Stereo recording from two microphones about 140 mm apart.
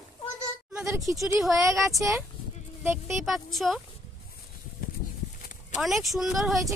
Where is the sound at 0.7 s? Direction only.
5° right (ahead or behind).